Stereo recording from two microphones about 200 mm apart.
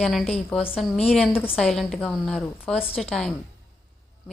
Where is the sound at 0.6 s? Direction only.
30° left (ahead or behind).